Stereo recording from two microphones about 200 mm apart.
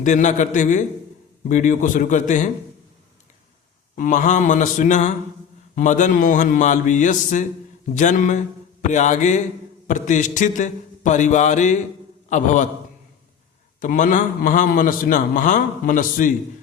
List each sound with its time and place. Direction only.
0.0 s a man's voice: 35° left (ahead or behind)
3.9 s a man's voice: 40° left (ahead or behind)
13.7 s a man's voice: 40° left (ahead or behind)